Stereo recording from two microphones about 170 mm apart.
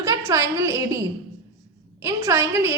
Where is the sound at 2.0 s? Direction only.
15° right (ahead or behind).